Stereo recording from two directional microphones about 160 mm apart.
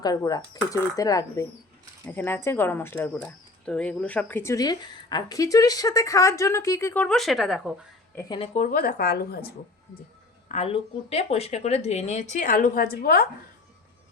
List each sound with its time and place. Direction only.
0.3 s speech: 25° left (ahead or behind); by 7.7 s centre (ahead or behind)
8.1 s a woman's voice: 20° left (ahead or behind)
8.4 s a woman's voice: 50° left (ahead or behind); by 9.5 s 80° left
10.5 s speech: 40° left (ahead or behind); by 13.2 s 70° left (ahead or behind)